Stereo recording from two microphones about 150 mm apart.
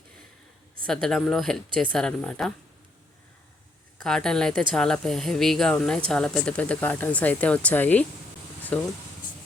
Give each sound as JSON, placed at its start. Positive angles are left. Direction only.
{"t": 1.0, "sound": "speech", "side_deg": 5}
{"t": 4.0, "sound": "a woman's voice", "side_deg": 5}
{"t": 9.3, "sound": "a sound", "side_deg": 65}